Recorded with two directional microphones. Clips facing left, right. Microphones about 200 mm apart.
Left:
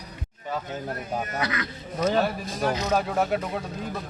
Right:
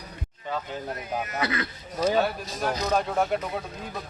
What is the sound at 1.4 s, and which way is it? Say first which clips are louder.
Speech: right 3 dB; 30° right (ahead or behind).